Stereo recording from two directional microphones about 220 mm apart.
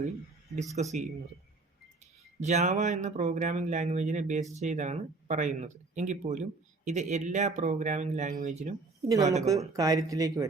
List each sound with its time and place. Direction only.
0.8 s speech: 30° right (ahead or behind)
2.4 s speech: 35° right (ahead or behind)
9.0 s speech: 15° right (ahead or behind)